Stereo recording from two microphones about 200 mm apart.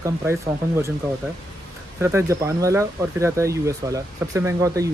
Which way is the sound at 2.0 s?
10° right (ahead or behind).